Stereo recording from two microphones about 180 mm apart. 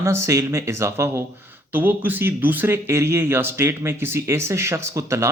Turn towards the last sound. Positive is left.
turn(degrees=-15)  # may be behind; listen again after turning